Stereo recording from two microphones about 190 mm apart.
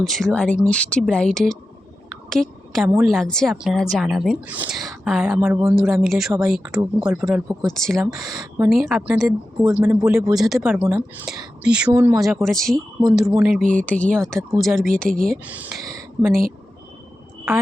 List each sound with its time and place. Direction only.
0.0 s a woman's voice: centre (ahead or behind)
8.0 s speech: 15° right (ahead or behind)
8.7 s a woman's voice: centre (ahead or behind)
13.6 s speech: 40° right (ahead or behind)
13.8 s a woman's voice: 5° left (ahead or behind)